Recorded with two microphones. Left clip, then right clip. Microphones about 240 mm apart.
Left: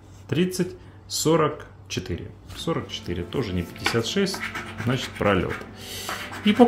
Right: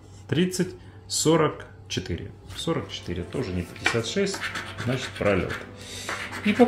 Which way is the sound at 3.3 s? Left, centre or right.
Left.